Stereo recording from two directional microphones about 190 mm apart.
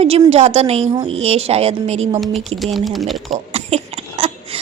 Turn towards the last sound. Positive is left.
turn(degrees=-30)  # may be behind; listen again after turning